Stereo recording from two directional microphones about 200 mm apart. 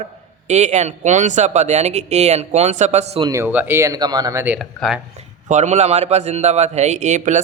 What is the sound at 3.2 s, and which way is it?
Speech, 10° right (ahead or behind).